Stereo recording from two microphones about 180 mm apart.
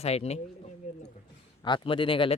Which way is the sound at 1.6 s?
25° left (ahead or behind).